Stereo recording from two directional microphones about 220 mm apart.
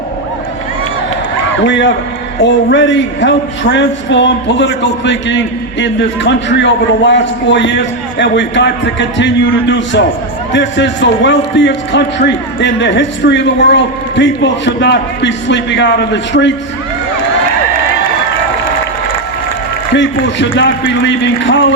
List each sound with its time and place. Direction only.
1.6 s a man's voice: 55° left (ahead or behind)
19.9 s a man's voice: 55° left (ahead or behind)